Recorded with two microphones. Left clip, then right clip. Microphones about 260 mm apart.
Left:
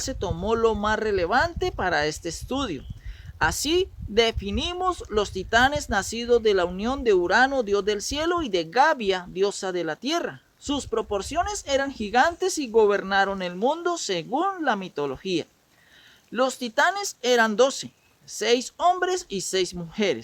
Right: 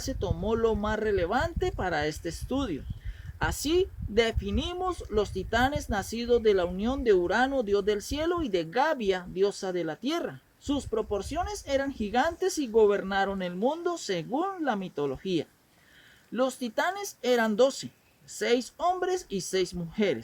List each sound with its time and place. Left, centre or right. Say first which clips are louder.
0.0 s speech: left 4 dB; left